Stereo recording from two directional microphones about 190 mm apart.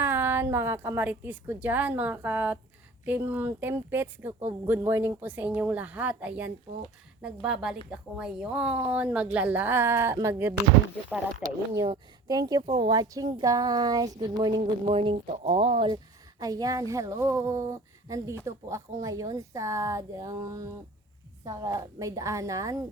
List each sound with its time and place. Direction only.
0.0 s a woman's voice: 10° right (ahead or behind)
11.4 s a woman's voice: 5° right (ahead or behind)
11.8 s a woman's voice: 20° right (ahead or behind)
14.8 s a woman's voice: 30° right (ahead or behind); by 22.8 s 15° right (ahead or behind)